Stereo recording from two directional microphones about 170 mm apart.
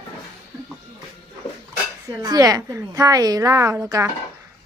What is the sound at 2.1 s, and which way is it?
A woman's voice, 20° right (ahead or behind).